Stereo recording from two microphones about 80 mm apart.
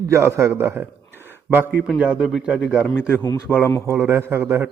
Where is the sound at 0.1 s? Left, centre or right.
Right; by 2.8 s centre.